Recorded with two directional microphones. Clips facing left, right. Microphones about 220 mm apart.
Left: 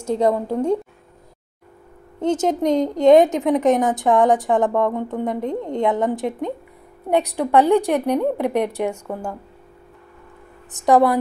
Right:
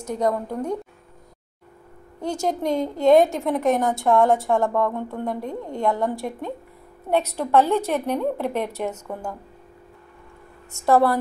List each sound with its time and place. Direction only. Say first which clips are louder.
0.0 s a woman's voice: left 5 dB; 25° left (ahead or behind)
2.1 s a woman's voice: left 6 dB; 20° left (ahead or behind)
10.7 s a woman's voice: left 3 dB; 15° left (ahead or behind)